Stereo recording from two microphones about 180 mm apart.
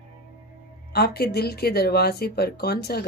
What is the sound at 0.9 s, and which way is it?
Speech, 60° left (ahead or behind).